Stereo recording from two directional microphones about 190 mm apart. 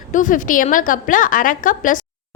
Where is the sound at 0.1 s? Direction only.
45° left (ahead or behind).